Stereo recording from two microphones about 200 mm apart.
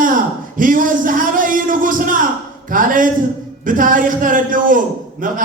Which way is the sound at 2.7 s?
40° right (ahead or behind).